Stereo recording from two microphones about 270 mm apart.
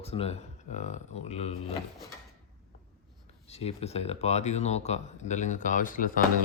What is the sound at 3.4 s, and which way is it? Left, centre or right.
Speech, left.